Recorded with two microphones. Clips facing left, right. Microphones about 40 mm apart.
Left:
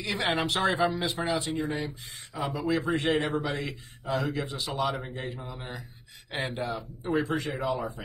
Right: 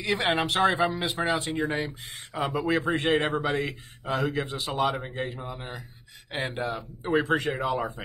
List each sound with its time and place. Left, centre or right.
0.0 s a man's voice: right
5.4 s a man's voice: centre
6.4 s speech: right